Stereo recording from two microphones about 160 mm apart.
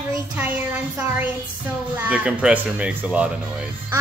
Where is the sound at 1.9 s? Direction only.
10° right (ahead or behind).